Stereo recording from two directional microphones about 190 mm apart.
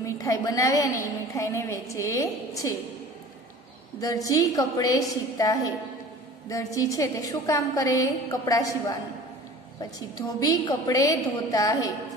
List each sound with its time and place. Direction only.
0.0 s a woman's voice: 20° left (ahead or behind)
4.0 s a woman's voice: 20° left (ahead or behind)